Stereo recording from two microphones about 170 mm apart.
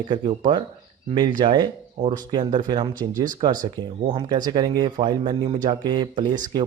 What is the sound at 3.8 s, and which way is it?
Speech, 25° right (ahead or behind).